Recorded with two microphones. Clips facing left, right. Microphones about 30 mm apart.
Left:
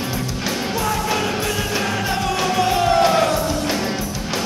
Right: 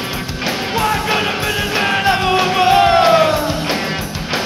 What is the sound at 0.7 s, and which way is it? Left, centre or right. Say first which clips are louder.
Music: right 6 dB; right.